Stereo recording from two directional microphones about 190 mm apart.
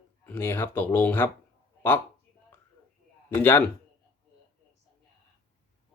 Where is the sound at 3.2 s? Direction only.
10° left (ahead or behind).